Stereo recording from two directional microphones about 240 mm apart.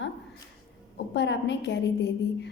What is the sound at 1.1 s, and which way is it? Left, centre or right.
Speech, left.